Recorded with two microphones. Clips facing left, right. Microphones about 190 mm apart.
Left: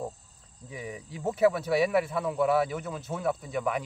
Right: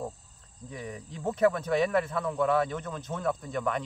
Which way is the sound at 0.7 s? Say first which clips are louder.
Even; 5° left (ahead or behind).